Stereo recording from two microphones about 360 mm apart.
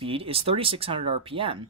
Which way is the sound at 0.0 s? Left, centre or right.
Centre.